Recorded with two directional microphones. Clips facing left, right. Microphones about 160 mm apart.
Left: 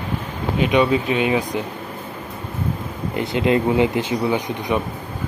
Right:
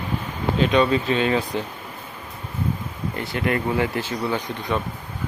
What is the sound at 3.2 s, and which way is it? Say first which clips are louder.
Speech: left 6 dB; 20° left (ahead or behind).